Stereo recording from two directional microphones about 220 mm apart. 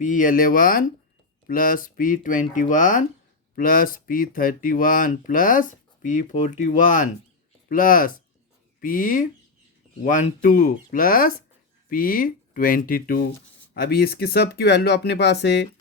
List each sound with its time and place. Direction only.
0.0 s speech: 35° left (ahead or behind)